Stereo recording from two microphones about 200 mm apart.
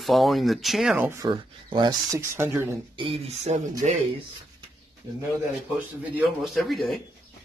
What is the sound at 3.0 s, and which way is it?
Speech, 25° right (ahead or behind).